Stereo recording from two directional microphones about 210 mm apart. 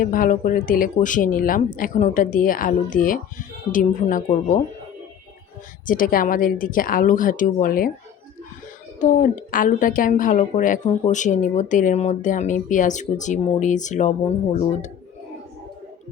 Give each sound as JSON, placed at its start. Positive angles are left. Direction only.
{"t": 0.0, "sound": "a woman's voice", "side_deg": 40}
{"t": 5.8, "sound": "a woman's voice", "side_deg": 40}
{"t": 9.0, "sound": "a woman's voice", "side_deg": 35}